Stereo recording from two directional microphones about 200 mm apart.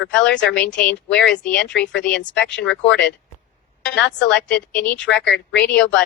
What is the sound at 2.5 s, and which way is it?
Speech, 65° left (ahead or behind).